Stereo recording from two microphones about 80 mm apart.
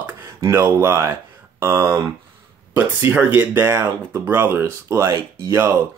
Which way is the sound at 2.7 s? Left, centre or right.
Right.